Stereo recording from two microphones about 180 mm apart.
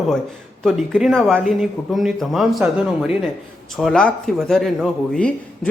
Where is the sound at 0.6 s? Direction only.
Centre (ahead or behind).